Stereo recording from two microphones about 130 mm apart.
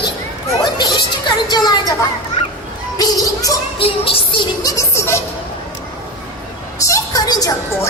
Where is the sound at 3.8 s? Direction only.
45° left (ahead or behind).